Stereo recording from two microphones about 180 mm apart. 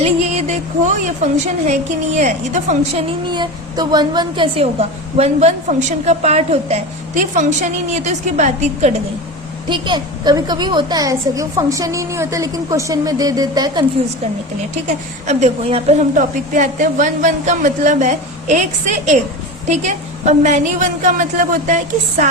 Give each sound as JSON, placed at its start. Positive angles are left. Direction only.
{"t": 0.0, "sound": "a woman's voice", "side_deg": -40}
{"t": 3.2, "sound": "a woman's voice", "side_deg": -25}
{"t": 9.6, "sound": "a woman's voice", "side_deg": -25}
{"t": 15.3, "sound": "a woman's voice", "side_deg": -40}